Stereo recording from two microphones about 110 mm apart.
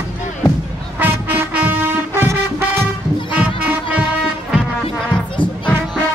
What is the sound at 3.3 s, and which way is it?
Music, 10° right (ahead or behind).